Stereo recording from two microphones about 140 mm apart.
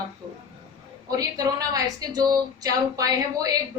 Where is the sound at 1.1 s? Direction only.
25° right (ahead or behind).